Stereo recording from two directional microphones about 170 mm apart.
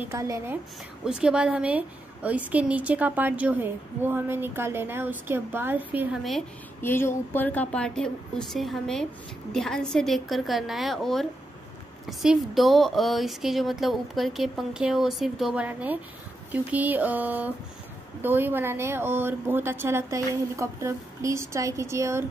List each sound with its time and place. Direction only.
0.0 s a woman's voice: 20° right (ahead or behind)
1.0 s a woman's voice: 5° right (ahead or behind)
6.8 s a woman's voice: 15° left (ahead or behind); by 22.2 s 15° right (ahead or behind)